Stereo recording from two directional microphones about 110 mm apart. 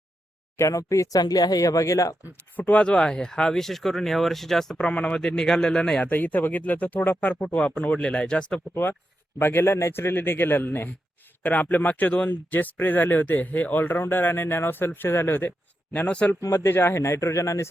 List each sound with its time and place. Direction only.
0.5 s speech: 30° left (ahead or behind)
2.6 s speech: 10° left (ahead or behind)
8.7 s a man's voice: 20° left (ahead or behind)
16.4 s a man's voice: 25° left (ahead or behind)